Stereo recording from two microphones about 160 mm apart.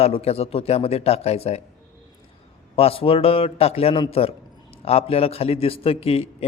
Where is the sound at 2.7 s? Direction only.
35° left (ahead or behind).